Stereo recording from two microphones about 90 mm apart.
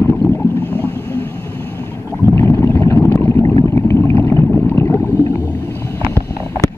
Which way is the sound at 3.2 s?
30° left (ahead or behind).